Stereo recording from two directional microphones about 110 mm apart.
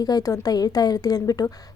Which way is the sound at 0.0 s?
35° left (ahead or behind).